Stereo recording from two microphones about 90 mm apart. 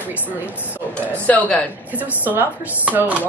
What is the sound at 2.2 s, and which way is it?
Speech, 20° right (ahead or behind).